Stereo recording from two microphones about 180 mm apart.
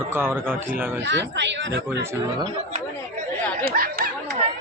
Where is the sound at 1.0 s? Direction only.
80° right.